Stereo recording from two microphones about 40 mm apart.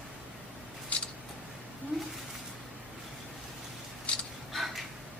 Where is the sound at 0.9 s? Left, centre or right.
Left.